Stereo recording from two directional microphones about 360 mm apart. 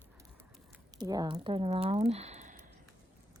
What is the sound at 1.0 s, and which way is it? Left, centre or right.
Speech, centre.